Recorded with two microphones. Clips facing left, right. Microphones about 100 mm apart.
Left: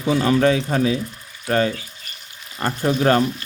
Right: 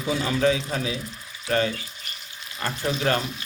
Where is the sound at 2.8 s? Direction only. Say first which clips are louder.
Left 8 dB; 45° left (ahead or behind).